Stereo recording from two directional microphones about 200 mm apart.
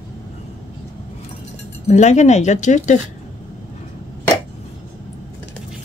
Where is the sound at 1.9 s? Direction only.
35° left (ahead or behind).